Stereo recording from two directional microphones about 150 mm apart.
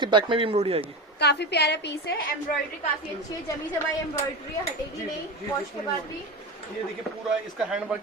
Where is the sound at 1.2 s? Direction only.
90° left.